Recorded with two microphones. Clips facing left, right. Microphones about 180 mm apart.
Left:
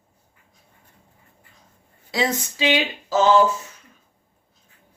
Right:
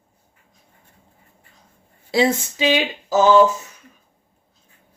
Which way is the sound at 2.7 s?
20° right (ahead or behind).